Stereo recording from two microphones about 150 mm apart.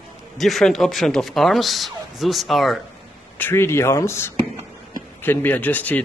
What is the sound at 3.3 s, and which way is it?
A man's voice, 15° left (ahead or behind).